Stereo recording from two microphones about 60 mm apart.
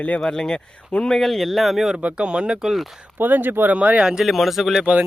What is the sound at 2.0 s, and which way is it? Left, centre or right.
Speech, centre.